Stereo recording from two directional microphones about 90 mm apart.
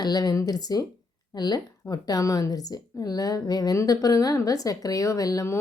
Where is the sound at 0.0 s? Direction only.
45° left (ahead or behind).